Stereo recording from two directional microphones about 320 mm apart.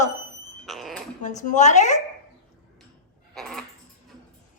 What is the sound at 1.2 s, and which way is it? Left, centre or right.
Speech, left.